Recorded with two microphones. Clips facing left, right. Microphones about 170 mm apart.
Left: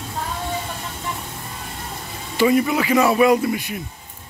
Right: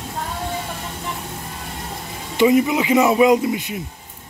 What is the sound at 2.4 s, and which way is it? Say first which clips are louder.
Speech: right 2 dB; 20° right (ahead or behind).